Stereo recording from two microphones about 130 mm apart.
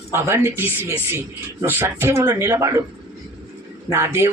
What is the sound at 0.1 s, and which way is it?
Speech, 20° right (ahead or behind).